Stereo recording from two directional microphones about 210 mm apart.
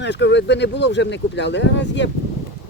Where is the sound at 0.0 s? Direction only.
55° left (ahead or behind).